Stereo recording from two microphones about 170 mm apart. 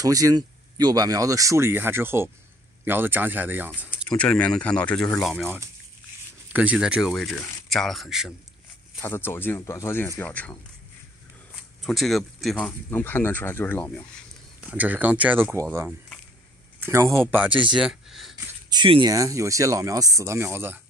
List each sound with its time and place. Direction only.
0.0 s speech: 20° right (ahead or behind)
3.9 s speech: 5° left (ahead or behind)
6.5 s speech: 10° right (ahead or behind)
9.0 s speech: 10° left (ahead or behind)
11.8 s speech: centre (ahead or behind)
14.7 s speech: 10° right (ahead or behind)
18.3 s speech: 25° right (ahead or behind)